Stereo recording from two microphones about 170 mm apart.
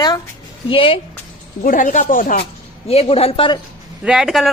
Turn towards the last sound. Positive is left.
turn(degrees=0)  # may be behind; listen again after turning